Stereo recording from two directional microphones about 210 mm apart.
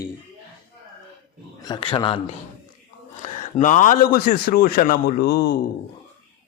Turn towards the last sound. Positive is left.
turn(degrees=45)  # may be behind; listen again after turning